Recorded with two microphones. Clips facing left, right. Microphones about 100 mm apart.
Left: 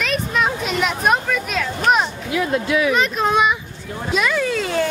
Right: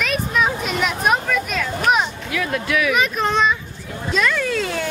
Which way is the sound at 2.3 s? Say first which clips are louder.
Left 4 dB; 25° left (ahead or behind).